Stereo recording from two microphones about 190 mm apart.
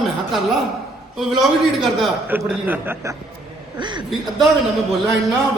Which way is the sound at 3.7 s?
25° right (ahead or behind).